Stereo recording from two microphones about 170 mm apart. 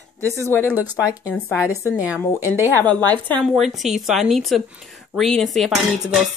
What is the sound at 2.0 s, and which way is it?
Speech, 10° right (ahead or behind).